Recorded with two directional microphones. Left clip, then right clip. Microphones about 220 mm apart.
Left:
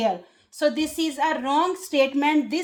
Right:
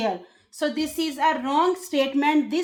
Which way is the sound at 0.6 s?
35° left (ahead or behind).